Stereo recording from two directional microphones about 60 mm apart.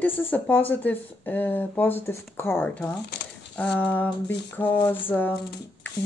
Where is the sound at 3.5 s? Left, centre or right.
Centre.